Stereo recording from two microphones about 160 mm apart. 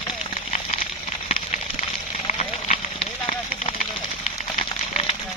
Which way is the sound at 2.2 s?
45° left (ahead or behind).